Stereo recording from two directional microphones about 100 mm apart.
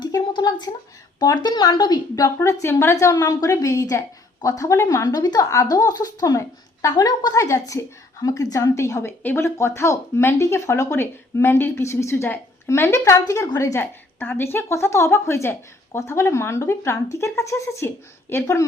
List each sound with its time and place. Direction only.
0.0 s a sound: 45° left (ahead or behind)
1.2 s a woman's voice: 45° left (ahead or behind)
13.7 s a woman's voice: 20° left (ahead or behind)